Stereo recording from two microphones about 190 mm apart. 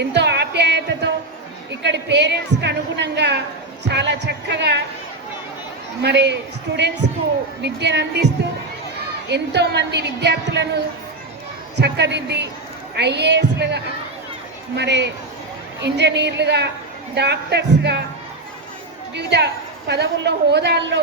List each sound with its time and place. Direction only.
0.0 s music: 65° right (ahead or behind)
1.8 s a woman's voice: 65° right (ahead or behind)
6.0 s a woman's voice: 60° right (ahead or behind)
9.3 s a woman's voice: 60° right (ahead or behind)
11.8 s a woman's voice: 65° right (ahead or behind)
19.1 s a woman's voice: 60° right (ahead or behind)